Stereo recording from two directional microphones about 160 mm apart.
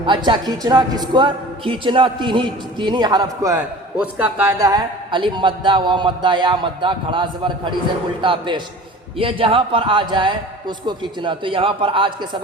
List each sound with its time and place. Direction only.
0.0 s a man's voice: 30° right (ahead or behind)
3.9 s a man's voice: 10° right (ahead or behind); by 12.4 s 30° right (ahead or behind)